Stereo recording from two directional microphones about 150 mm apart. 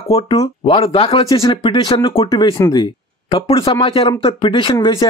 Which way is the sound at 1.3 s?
25° left (ahead or behind).